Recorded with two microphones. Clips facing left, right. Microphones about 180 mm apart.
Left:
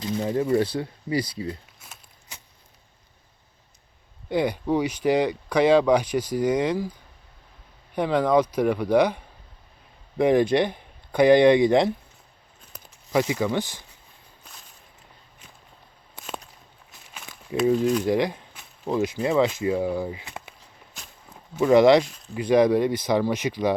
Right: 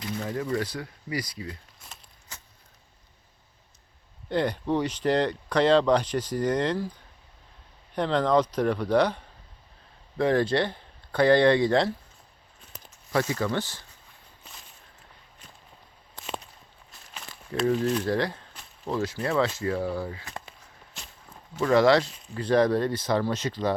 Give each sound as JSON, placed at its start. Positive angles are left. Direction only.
{"t": 0.0, "sound": "a sound", "side_deg": 20}
{"t": 0.5, "sound": "speech", "side_deg": 30}
{"t": 1.8, "sound": "walk", "side_deg": 5}
{"t": 4.3, "sound": "speech", "side_deg": 10}
{"t": 7.9, "sound": "speech", "side_deg": 10}
{"t": 13.1, "sound": "speech", "side_deg": 15}
{"t": 17.6, "sound": "speech", "side_deg": 0}
{"t": 18.0, "sound": "speech", "side_deg": 15}
{"t": 21.5, "sound": "speech", "side_deg": 20}